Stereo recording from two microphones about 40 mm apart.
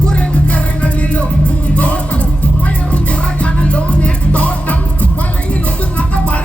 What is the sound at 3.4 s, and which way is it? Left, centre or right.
Music, left.